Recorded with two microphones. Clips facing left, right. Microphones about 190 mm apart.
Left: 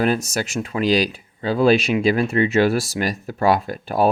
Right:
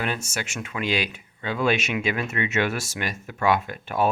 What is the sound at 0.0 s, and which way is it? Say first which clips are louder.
Speech: left 9 dB; 40° left (ahead or behind).